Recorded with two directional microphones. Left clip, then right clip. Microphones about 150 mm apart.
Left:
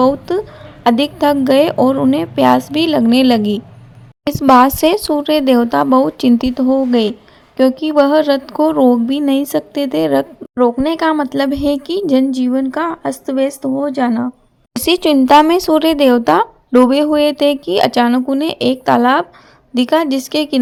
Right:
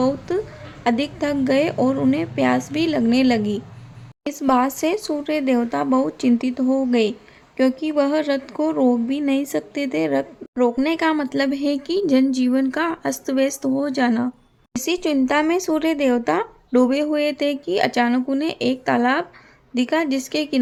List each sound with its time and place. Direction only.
0.0 s speech: 30° left (ahead or behind)
10.5 s speech: 20° left (ahead or behind)
14.8 s speech: 40° left (ahead or behind)